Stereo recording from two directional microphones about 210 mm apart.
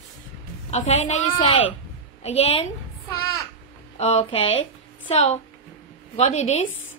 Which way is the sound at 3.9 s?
30° left (ahead or behind).